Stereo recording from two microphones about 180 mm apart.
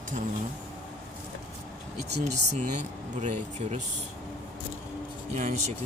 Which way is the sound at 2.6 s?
40° right (ahead or behind).